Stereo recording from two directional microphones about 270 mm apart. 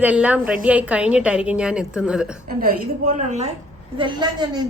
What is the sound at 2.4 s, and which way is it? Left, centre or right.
A woman's voice, right.